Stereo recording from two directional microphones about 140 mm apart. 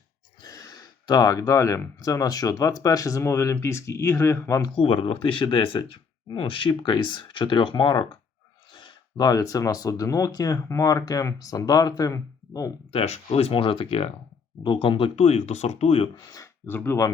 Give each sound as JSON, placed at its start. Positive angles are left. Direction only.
{"t": 0.4, "sound": "speech", "side_deg": 25}
{"t": 4.7, "sound": "speech", "side_deg": 40}
{"t": 12.9, "sound": "speech", "side_deg": 45}
{"t": 16.1, "sound": "speech", "side_deg": 25}
{"t": 16.6, "sound": "speech", "side_deg": 15}